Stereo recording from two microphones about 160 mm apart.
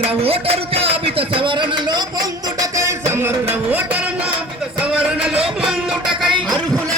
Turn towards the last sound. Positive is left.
turn(degrees=-5)  # may be behind; listen again after turning